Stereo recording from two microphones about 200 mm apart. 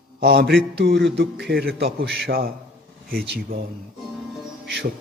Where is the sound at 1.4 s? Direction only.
50° right (ahead or behind).